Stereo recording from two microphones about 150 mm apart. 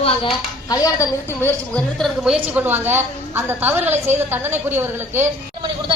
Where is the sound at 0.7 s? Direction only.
25° left (ahead or behind).